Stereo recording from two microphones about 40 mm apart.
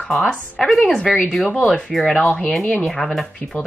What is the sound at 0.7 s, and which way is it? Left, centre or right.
Speech, centre.